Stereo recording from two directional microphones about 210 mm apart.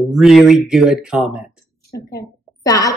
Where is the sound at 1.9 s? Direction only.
15° left (ahead or behind).